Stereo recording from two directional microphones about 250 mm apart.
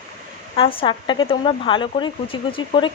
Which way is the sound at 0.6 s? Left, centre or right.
Left.